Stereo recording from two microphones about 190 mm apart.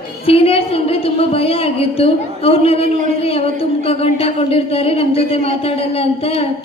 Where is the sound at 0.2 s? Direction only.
30° left (ahead or behind).